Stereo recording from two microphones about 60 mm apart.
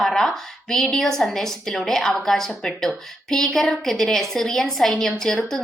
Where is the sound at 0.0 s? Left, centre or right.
Centre.